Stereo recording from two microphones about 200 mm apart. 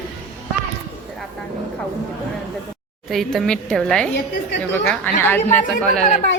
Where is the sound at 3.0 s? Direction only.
Centre (ahead or behind).